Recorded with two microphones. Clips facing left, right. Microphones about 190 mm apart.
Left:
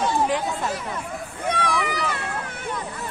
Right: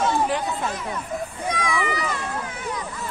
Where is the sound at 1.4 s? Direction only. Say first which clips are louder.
Left 2 dB; 60° left (ahead or behind).